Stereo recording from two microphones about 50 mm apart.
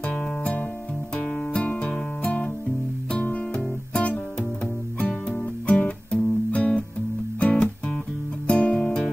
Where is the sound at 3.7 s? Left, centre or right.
Left.